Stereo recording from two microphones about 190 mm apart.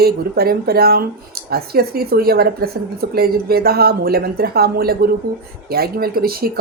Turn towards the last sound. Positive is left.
turn(degrees=-50)  # may be behind; listen again after turning